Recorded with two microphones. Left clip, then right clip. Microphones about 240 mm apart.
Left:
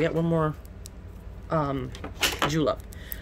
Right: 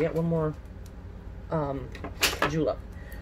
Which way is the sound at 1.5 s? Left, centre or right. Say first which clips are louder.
Left 3 dB; left.